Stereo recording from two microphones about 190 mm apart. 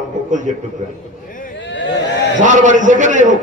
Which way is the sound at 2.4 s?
40° right (ahead or behind).